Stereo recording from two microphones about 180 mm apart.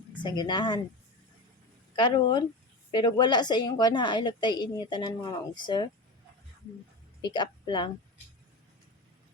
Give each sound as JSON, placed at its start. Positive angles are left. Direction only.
{"t": 0.2, "sound": "a woman's voice", "side_deg": 25}
{"t": 2.0, "sound": "a woman's voice", "side_deg": 25}
{"t": 7.2, "sound": "speech", "side_deg": 25}